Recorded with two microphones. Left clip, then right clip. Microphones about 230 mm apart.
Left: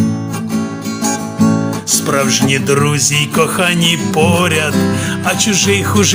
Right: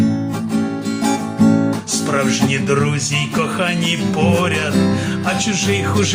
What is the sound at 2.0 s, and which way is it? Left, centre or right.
Music, left.